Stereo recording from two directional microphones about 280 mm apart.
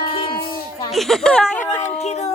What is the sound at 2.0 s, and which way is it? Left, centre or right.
Music, left.